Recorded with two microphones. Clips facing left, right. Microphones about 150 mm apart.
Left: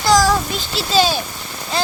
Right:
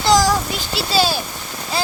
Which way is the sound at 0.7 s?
5° right (ahead or behind).